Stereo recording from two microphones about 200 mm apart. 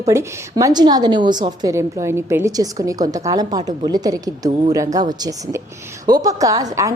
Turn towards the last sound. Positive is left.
turn(degrees=-15)  # may be behind; listen again after turning